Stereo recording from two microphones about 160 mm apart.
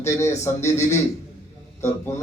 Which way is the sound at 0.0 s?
15° left (ahead or behind).